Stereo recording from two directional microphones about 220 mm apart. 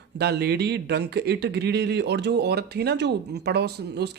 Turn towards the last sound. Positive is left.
turn(degrees=-50)  # may be behind; listen again after turning